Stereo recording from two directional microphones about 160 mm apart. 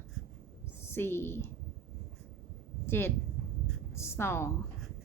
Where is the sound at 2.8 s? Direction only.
15° left (ahead or behind).